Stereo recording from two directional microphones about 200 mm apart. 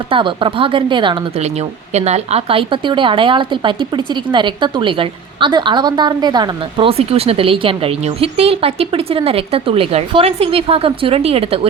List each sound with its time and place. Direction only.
0.1 s speech: 25° right (ahead or behind)